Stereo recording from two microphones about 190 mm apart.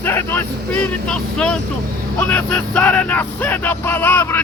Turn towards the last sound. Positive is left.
turn(degrees=10)  # may be behind; listen again after turning